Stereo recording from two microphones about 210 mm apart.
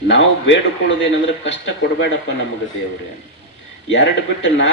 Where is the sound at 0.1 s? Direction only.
60° left (ahead or behind).